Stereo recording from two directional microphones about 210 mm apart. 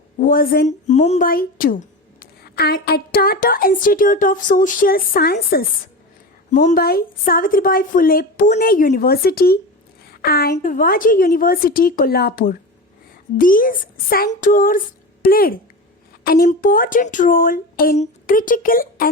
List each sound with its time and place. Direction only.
0.2 s a woman's voice: 40° left (ahead or behind)
6.5 s a woman's voice: 35° left (ahead or behind)